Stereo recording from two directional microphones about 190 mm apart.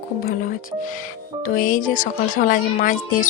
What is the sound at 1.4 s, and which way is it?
Speech, 45° left (ahead or behind).